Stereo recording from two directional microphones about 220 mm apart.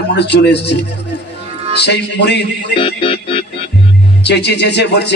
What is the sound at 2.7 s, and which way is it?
Music, 25° left (ahead or behind).